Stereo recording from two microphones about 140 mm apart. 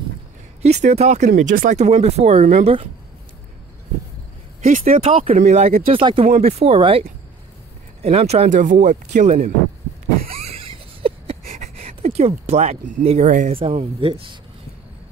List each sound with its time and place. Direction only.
0.6 s speech: 55° right (ahead or behind)
1.3 s speech: 80° right
1.8 s speech: 50° right (ahead or behind)
4.6 s speech: 70° right (ahead or behind)
5.2 s speech: 55° right (ahead or behind)
5.9 s speech: 40° right (ahead or behind)
8.5 s speech: 60° right (ahead or behind)
10.2 s a sound: 45° right (ahead or behind)
11.5 s a sound: 50° right (ahead or behind)
13.5 s speech: 40° right (ahead or behind)